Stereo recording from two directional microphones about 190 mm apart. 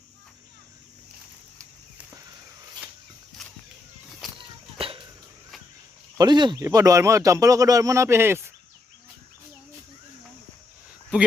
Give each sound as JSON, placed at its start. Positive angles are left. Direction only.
{"t": 4.4, "sound": "walk", "side_deg": -30}
{"t": 6.1, "sound": "speech", "side_deg": -25}